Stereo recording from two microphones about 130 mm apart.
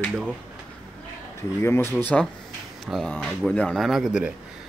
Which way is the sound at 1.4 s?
20° left (ahead or behind).